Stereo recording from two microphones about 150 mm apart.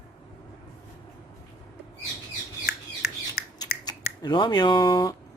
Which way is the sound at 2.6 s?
90° left.